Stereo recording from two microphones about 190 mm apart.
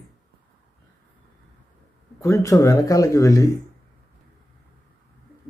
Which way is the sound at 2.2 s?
15° left (ahead or behind).